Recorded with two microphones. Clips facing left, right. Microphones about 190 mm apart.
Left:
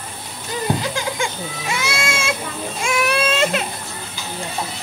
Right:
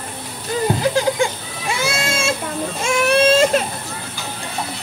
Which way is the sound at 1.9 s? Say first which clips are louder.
Right 2 dB; 35° right (ahead or behind).